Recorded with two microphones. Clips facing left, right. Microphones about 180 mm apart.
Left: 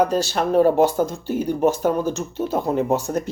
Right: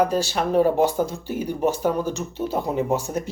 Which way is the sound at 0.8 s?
10° right (ahead or behind).